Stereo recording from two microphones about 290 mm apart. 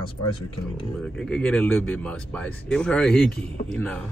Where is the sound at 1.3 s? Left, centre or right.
Centre.